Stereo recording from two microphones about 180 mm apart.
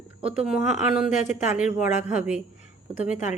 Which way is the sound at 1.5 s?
5° right (ahead or behind).